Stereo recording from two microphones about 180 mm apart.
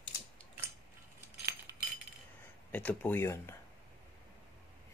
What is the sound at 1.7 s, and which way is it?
Chink, 20° right (ahead or behind).